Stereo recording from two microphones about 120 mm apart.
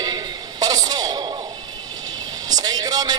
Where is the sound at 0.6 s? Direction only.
35° right (ahead or behind).